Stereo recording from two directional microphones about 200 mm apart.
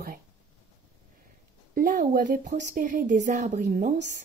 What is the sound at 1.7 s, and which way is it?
Speech, 45° right (ahead or behind).